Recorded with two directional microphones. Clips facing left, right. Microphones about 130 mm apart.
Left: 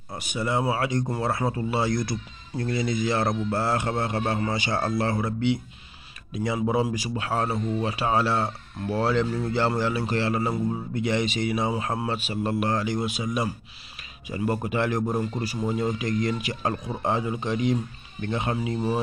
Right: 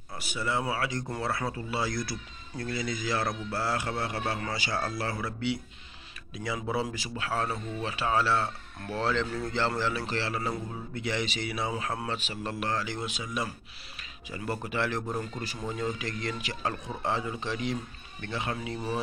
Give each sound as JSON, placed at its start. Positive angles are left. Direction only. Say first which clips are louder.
{"t": 0.2, "sound": "a man's voice", "louder": "left 5 dB", "side_deg": 20}